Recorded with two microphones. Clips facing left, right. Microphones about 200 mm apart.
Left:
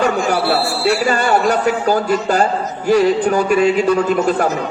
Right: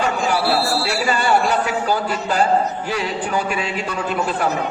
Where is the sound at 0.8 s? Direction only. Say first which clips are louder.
Left 5 dB; 50° left (ahead or behind).